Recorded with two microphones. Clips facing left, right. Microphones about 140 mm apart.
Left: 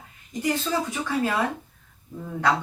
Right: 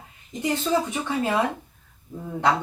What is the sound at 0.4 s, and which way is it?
Speech, 20° right (ahead or behind).